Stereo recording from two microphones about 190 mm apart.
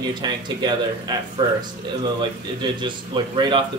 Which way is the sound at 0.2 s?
25° right (ahead or behind).